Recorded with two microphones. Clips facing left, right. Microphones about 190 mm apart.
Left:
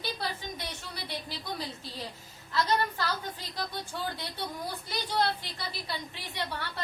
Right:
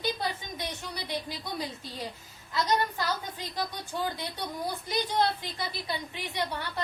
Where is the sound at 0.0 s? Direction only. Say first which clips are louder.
Right 3 dB; 15° right (ahead or behind).